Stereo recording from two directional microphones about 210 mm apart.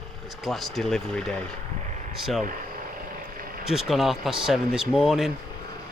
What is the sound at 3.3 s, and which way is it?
Vehicle, 45° right (ahead or behind).